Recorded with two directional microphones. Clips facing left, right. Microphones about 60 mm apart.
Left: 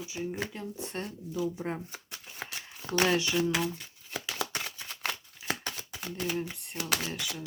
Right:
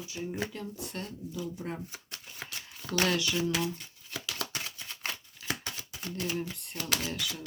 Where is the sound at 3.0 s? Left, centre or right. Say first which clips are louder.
Left 2 dB; left.